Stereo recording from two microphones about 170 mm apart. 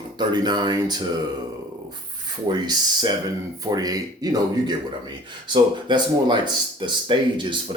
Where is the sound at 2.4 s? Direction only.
25° right (ahead or behind).